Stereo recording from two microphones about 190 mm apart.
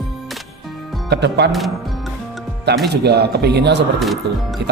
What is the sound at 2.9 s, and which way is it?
Speech, 60° right (ahead or behind).